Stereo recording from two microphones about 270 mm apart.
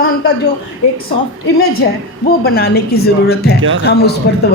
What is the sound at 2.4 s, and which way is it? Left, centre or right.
A woman's voice, left.